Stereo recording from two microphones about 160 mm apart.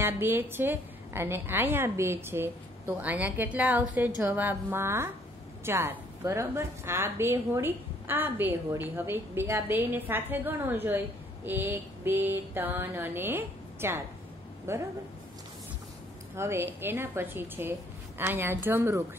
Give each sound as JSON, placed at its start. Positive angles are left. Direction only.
{"t": 0.0, "sound": "a woman's voice", "side_deg": -15}
{"t": 16.3, "sound": "a woman's voice", "side_deg": -15}